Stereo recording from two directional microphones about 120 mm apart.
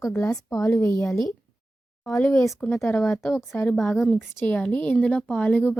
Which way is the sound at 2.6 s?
Centre (ahead or behind).